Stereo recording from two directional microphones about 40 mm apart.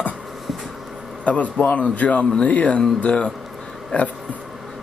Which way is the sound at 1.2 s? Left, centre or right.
Left.